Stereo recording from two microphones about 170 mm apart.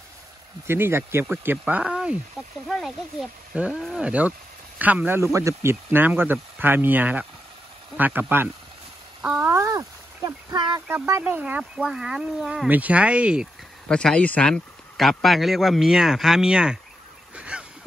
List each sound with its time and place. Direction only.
0.7 s a man's voice: 15° right (ahead or behind)
9.2 s a sound: 5° right (ahead or behind); by 10.8 s 25° right (ahead or behind)
10.9 s speech: 15° right (ahead or behind)
13.8 s a man's voice: 5° left (ahead or behind)
17.4 s honk: 5° right (ahead or behind)